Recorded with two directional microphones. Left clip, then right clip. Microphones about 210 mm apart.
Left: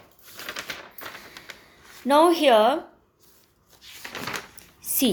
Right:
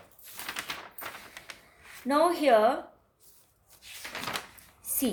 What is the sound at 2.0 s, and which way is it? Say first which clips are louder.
Speech: left 7 dB; 40° left (ahead or behind).